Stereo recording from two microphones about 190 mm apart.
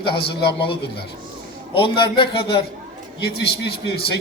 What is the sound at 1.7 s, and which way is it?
Speech, 25° left (ahead or behind).